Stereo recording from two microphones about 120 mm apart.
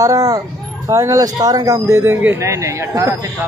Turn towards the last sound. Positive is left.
turn(degrees=-25)  # may be behind; listen again after turning